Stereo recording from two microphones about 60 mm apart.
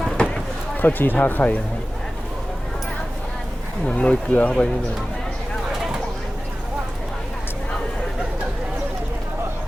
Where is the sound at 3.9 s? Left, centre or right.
Left.